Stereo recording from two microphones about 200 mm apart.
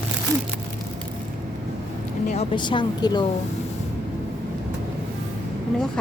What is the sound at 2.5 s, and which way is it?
Speech, 25° left (ahead or behind).